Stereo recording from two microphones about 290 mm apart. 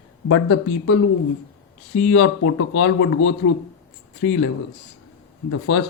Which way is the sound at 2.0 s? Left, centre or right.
Left.